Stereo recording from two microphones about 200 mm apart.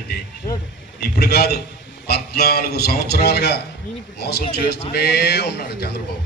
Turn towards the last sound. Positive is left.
turn(degrees=55)  # may be behind; listen again after turning